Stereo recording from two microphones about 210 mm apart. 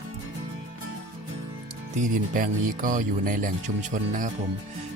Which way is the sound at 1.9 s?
35° right (ahead or behind).